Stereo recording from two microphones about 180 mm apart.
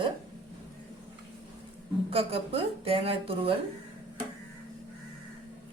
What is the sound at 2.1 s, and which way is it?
A woman's voice, 30° right (ahead or behind).